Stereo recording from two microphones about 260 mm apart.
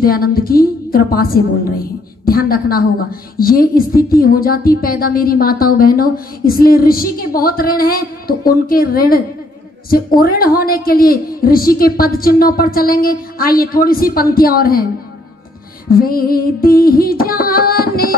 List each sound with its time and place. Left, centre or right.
0.0 s a woman's voice: left
15.9 s a woman's voice: left